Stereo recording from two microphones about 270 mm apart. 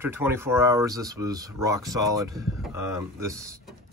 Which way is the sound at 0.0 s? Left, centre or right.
Centre.